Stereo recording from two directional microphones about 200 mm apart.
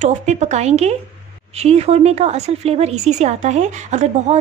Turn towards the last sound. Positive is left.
turn(degrees=-35)  # may be behind; listen again after turning